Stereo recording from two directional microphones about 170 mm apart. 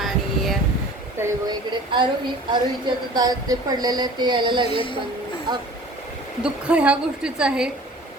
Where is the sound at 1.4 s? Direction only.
30° right (ahead or behind).